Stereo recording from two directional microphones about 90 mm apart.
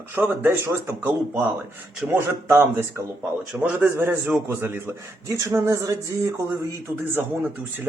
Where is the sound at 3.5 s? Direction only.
5° right (ahead or behind).